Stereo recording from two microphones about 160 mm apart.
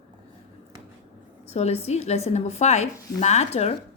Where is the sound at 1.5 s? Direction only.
40° left (ahead or behind).